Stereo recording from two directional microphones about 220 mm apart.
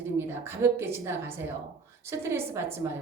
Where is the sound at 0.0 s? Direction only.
10° right (ahead or behind).